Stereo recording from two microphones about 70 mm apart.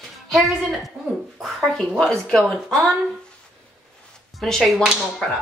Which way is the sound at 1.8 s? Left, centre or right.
Centre.